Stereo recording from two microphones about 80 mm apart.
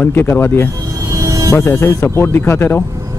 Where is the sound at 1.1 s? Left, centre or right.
Right.